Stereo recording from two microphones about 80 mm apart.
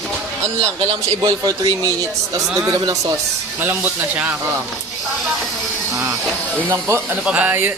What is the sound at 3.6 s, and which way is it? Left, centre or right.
Speech, right.